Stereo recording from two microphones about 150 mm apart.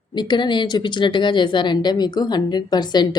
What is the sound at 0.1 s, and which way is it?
Speech, 30° left (ahead or behind).